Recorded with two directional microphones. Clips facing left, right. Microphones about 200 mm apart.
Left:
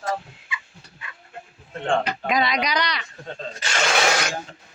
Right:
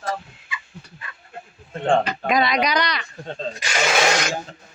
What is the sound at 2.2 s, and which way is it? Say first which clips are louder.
Speech: right 3 dB; 50° right (ahead or behind).